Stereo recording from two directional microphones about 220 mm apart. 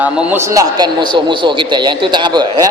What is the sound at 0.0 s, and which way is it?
A man's voice, 5° right (ahead or behind).